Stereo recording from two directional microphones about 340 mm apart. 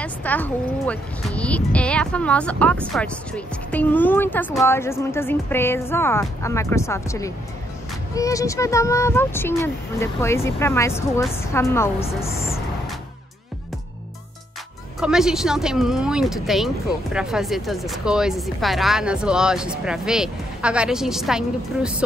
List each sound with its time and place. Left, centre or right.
0.0 s speech: centre
15.0 s speech: centre